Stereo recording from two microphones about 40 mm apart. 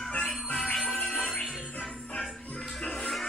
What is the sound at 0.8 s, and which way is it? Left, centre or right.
Music, centre.